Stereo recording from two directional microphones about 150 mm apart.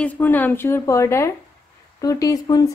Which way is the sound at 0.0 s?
10° left (ahead or behind).